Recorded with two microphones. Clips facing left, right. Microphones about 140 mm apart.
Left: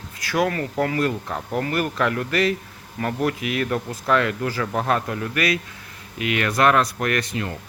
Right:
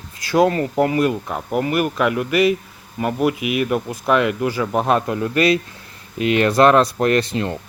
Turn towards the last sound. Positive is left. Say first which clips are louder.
# right 6 dB
turn(degrees=-30)  # may be behind; listen again after turning